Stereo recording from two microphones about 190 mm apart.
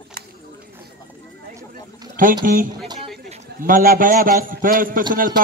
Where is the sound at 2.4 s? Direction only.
45° right (ahead or behind).